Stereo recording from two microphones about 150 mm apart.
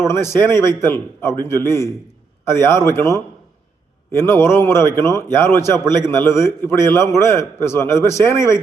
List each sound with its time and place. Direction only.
0.1 s a man's voice: 15° left (ahead or behind)